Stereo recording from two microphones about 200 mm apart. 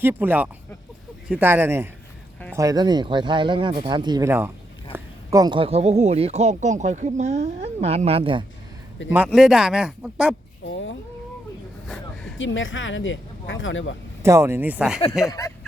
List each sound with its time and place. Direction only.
0.0 s speech: 10° right (ahead or behind); by 8.4 s 25° right (ahead or behind)
9.1 s speech: 5° right (ahead or behind)
10.7 s speech: 70° left (ahead or behind)
12.4 s speech: 75° left (ahead or behind)
14.2 s speech: 15° right (ahead or behind)
15.3 s speech: 15° left (ahead or behind)